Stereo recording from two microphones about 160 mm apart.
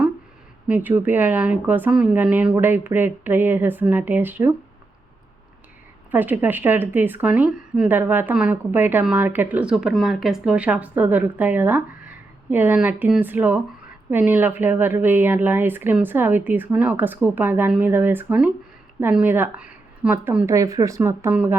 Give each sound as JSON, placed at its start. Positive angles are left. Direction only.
{"t": 0.7, "sound": "speech", "side_deg": -10}
{"t": 6.1, "sound": "speech", "side_deg": -10}